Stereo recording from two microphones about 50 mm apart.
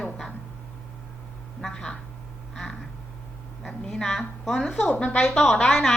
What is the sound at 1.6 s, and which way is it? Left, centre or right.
Speech, centre.